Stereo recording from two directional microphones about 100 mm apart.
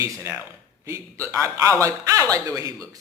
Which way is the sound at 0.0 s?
25° right (ahead or behind).